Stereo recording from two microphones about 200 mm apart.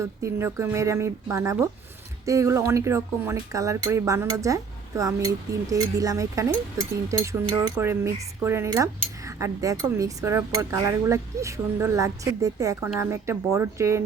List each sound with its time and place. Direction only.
0.0 s speech: 15° right (ahead or behind)